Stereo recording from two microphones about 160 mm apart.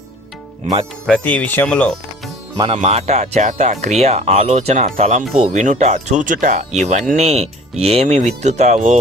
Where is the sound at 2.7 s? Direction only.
45° right (ahead or behind).